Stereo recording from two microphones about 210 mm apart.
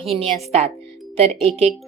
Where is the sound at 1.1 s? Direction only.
30° right (ahead or behind).